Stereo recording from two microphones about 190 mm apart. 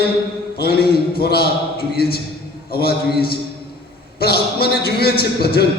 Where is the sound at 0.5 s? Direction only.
55° left (ahead or behind).